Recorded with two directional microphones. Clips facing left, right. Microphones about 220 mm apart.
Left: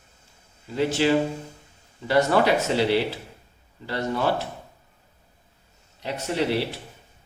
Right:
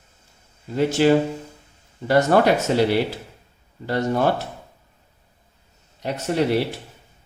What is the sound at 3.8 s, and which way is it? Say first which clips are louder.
Speech: right 4 dB; 45° right (ahead or behind).